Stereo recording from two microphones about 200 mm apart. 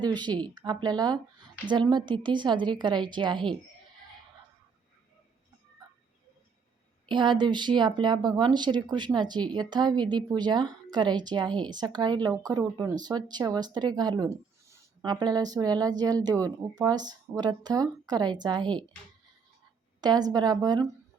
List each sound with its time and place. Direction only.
0.0 s speech: 20° right (ahead or behind)
7.1 s speech: 20° right (ahead or behind)
20.0 s speech: 20° right (ahead or behind)